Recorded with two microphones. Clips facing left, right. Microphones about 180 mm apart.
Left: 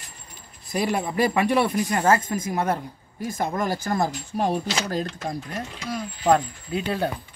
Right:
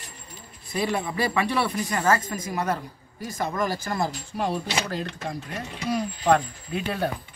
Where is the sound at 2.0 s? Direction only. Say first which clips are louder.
Left 2 dB; 25° left (ahead or behind).